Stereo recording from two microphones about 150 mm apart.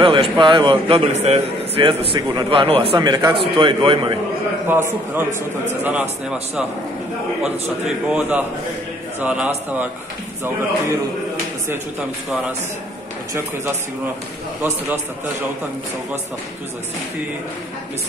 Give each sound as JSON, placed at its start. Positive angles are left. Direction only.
{"t": 0.0, "sound": "a man's voice", "side_deg": -35}
{"t": 1.8, "sound": "a man's voice", "side_deg": -35}
{"t": 4.6, "sound": "a man's voice", "side_deg": -15}